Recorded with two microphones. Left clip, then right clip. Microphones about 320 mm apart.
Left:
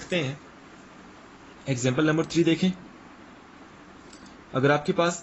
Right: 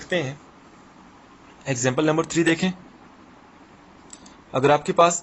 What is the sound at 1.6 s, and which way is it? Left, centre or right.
A man's voice, centre.